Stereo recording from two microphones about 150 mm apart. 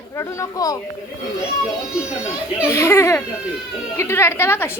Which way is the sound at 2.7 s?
20° left (ahead or behind).